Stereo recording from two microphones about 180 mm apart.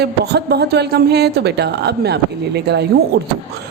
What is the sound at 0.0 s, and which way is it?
A woman's voice, 65° right (ahead or behind).